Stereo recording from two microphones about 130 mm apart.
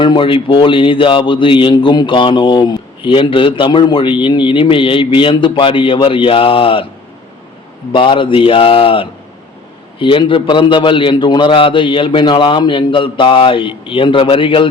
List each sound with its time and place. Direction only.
0.0 s speech: 40° left (ahead or behind)
7.9 s speech: 40° left (ahead or behind)